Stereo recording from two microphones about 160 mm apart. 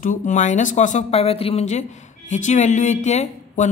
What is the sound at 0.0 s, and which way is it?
Speech, 55° left (ahead or behind).